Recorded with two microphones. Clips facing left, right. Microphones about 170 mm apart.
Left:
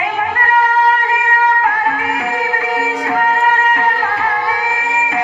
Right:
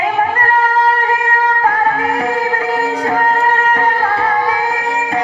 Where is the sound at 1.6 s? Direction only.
35° right (ahead or behind).